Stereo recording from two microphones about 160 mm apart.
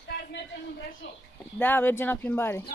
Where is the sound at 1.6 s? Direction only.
10° left (ahead or behind).